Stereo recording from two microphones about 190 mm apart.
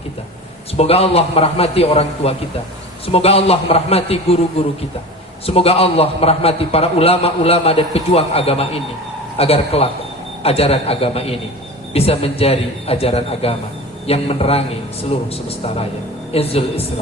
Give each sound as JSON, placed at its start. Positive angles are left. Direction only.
{"t": 0.8, "sound": "a man's voice", "side_deg": 30}
{"t": 16.3, "sound": "a man's voice", "side_deg": 30}